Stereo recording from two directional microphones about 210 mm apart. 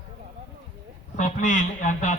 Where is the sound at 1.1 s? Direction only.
35° left (ahead or behind).